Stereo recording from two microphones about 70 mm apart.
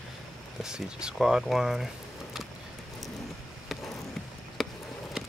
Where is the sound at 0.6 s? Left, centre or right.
Centre.